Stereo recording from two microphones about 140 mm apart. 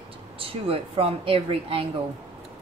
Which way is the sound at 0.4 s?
45° right (ahead or behind).